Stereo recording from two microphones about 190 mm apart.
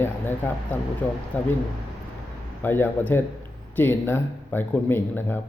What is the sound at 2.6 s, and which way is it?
Speech, 10° left (ahead or behind).